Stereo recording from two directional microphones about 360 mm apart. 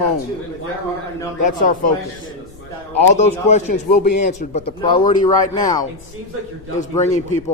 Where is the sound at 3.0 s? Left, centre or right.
Centre.